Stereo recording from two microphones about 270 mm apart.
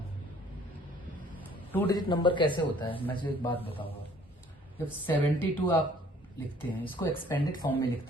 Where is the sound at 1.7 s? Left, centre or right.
Centre.